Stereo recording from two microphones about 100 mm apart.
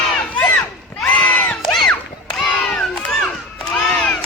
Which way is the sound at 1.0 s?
10° left (ahead or behind).